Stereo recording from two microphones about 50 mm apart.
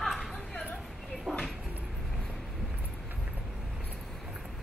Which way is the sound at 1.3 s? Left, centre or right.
Centre.